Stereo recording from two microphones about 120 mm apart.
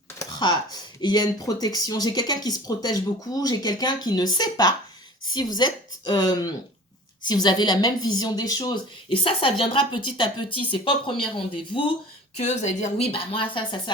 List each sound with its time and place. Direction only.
0.2 s a woman's voice: 35° left (ahead or behind)
12.4 s speech: 75° left (ahead or behind); by 13.9 s 40° left (ahead or behind)